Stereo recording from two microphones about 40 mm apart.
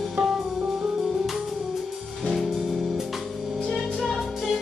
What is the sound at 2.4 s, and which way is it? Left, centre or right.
Music, centre.